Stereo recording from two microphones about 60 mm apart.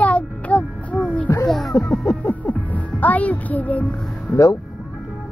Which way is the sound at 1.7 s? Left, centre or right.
Left.